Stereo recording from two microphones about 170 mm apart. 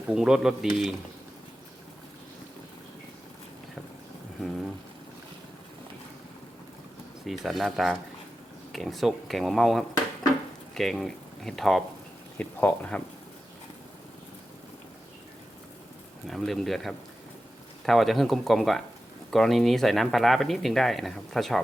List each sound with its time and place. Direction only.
0.1 s speech: 5° right (ahead or behind)
7.3 s speech: centre (ahead or behind)
16.2 s speech: centre (ahead or behind)